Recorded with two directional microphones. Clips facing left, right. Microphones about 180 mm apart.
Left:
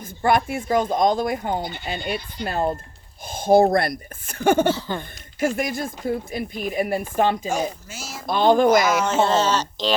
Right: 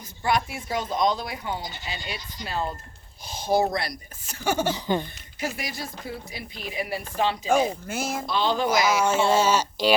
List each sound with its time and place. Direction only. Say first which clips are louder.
0.2 s speech: left 6 dB; 55° left (ahead or behind)
4.7 s speech: even; 15° right (ahead or behind)
5.4 s speech: left 9 dB; 50° left (ahead or behind)
7.5 s speech: right 3 dB; 55° right (ahead or behind)
8.3 s speech: left 9 dB; 50° left (ahead or behind)
8.8 s speech: left 2 dB; 10° right (ahead or behind)